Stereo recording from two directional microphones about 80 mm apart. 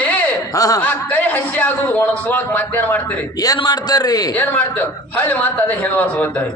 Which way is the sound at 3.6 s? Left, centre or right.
Left.